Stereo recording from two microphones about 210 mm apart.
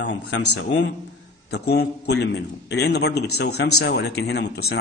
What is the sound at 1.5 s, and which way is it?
A man's voice, 50° left (ahead or behind).